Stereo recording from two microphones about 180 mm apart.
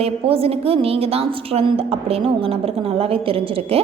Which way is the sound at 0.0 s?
35° right (ahead or behind).